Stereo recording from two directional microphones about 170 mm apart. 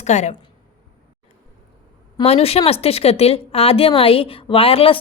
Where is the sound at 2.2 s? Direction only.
35° left (ahead or behind).